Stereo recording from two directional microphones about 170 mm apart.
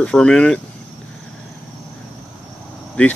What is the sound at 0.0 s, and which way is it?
Speech, 5° left (ahead or behind).